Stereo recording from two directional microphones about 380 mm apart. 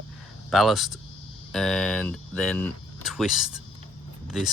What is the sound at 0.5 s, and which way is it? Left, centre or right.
Speech, centre.